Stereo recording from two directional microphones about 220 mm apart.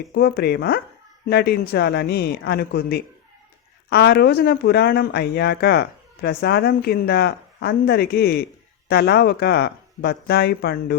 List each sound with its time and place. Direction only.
0.1 s speech: 45° left (ahead or behind)